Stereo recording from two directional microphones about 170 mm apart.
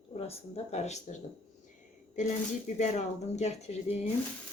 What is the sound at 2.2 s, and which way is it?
A woman's voice, 45° left (ahead or behind).